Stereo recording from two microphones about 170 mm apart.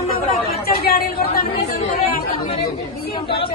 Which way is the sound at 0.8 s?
60° left (ahead or behind).